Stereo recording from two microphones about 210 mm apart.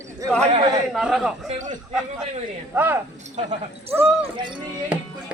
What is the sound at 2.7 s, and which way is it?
Speech, 10° right (ahead or behind).